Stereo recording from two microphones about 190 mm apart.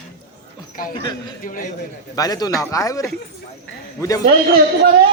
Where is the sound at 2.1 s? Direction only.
20° left (ahead or behind).